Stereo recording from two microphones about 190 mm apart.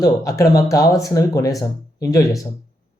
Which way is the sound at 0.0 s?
15° left (ahead or behind).